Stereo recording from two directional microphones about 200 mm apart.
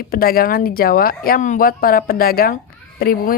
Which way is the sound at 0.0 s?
50° left (ahead or behind).